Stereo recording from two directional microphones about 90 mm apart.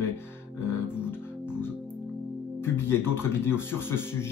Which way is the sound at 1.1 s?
25° left (ahead or behind).